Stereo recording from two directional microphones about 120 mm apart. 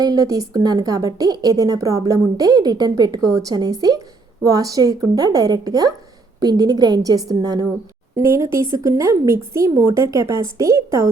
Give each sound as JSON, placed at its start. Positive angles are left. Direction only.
{"t": 0.0, "sound": "a woman's voice", "side_deg": -30}